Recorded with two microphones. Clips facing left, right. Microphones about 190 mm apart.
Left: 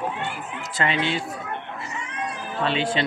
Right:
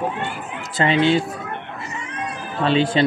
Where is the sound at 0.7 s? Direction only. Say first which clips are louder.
Right 8 dB; 30° right (ahead or behind).